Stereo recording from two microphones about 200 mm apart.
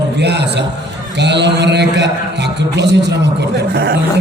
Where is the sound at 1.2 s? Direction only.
60° right (ahead or behind).